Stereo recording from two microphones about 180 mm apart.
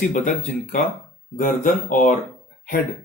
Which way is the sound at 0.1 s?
45° left (ahead or behind).